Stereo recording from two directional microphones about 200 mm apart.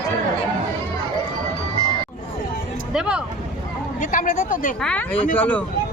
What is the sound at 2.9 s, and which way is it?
Speech, 5° right (ahead or behind).